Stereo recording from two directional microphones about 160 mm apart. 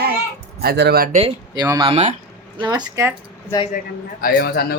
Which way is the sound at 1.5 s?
25° right (ahead or behind).